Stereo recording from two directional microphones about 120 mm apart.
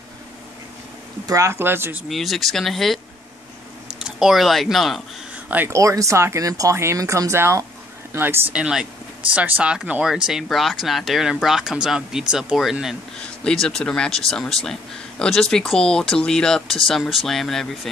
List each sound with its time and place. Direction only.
1.2 s speech: 25° right (ahead or behind)
2.0 s speech: centre (ahead or behind)
4.0 s speech: 5° right (ahead or behind)
5.3 s a sound: 15° right (ahead or behind)
5.7 s speech: 25° right (ahead or behind)
8.5 s speech: 5° right (ahead or behind)